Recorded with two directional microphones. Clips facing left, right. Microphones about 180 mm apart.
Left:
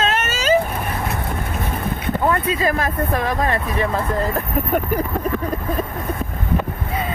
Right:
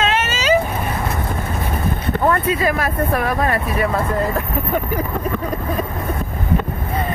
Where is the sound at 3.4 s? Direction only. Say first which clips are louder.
Right 1 dB; 25° left (ahead or behind).